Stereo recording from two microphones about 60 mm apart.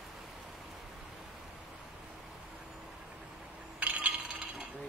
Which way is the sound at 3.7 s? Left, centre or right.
Right.